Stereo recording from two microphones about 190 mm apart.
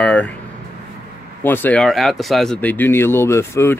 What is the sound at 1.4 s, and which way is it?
Speech, 10° left (ahead or behind).